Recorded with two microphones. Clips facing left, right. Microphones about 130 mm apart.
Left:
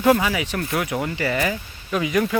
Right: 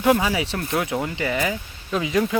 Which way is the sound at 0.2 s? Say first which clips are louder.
Even; 25° right (ahead or behind).